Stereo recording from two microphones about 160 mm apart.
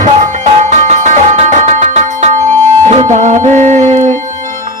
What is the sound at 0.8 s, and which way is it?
Music, 50° right (ahead or behind).